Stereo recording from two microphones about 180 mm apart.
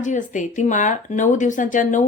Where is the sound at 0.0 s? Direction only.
45° left (ahead or behind).